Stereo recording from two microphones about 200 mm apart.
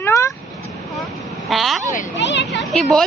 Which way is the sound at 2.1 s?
60° left (ahead or behind).